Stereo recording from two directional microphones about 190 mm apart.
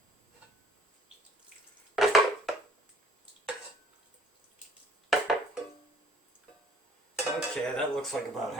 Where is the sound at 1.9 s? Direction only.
Centre (ahead or behind).